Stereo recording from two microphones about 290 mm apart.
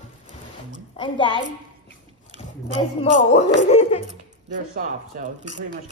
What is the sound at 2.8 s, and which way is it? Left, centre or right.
Speech, centre.